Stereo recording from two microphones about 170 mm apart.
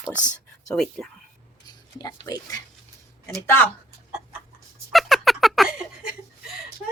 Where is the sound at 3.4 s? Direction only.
10° left (ahead or behind).